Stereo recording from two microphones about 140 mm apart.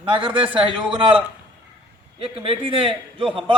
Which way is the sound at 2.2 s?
40° right (ahead or behind).